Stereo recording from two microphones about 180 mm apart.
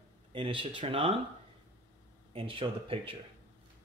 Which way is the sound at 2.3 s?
30° right (ahead or behind).